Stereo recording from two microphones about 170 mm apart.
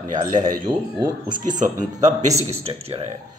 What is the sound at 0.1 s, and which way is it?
Speech, 50° right (ahead or behind).